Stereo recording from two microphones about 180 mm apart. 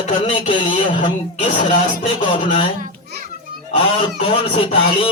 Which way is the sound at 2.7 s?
50° right (ahead or behind).